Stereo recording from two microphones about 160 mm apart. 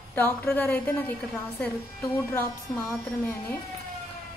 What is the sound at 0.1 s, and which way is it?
Speech, 10° left (ahead or behind).